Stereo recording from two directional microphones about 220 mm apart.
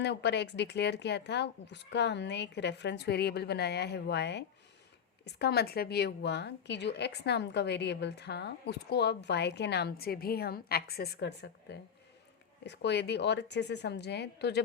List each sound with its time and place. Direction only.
0.0 s a woman's voice: 50° left (ahead or behind)